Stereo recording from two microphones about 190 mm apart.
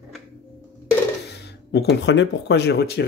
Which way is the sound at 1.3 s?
60° left (ahead or behind).